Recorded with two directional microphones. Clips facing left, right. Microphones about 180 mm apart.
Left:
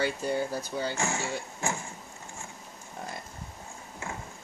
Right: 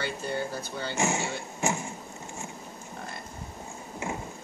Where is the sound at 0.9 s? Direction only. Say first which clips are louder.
Right 3 dB; 20° right (ahead or behind).